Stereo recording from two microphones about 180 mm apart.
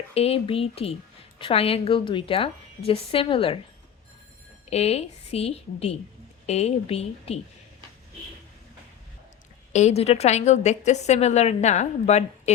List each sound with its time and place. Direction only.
0.1 s a woman's voice: 35° left (ahead or behind)
4.7 s a woman's voice: 35° left (ahead or behind)
9.7 s a woman's voice: 35° left (ahead or behind)